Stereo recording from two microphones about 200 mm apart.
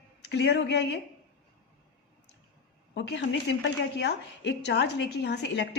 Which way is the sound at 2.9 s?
60° left (ahead or behind).